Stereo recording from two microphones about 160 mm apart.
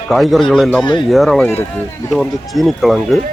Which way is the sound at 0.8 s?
30° left (ahead or behind).